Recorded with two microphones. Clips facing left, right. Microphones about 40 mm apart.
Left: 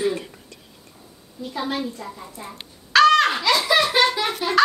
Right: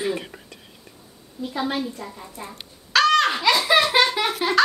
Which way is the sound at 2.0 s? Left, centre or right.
Centre.